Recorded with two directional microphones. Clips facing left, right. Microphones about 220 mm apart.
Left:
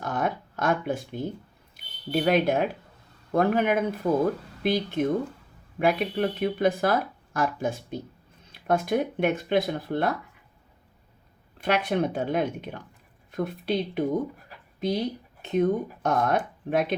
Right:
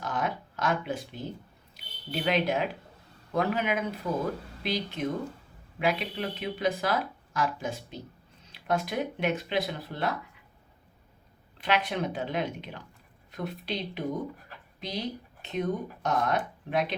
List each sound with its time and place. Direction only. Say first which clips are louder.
0.0 s a sound: left 4 dB; 50° left (ahead or behind)
2.1 s speech: left 5 dB; 50° left (ahead or behind)
11.6 s speech: left 4 dB; 50° left (ahead or behind)